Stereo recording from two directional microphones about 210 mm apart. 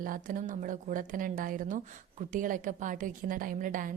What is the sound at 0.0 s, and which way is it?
A woman's voice, 40° right (ahead or behind).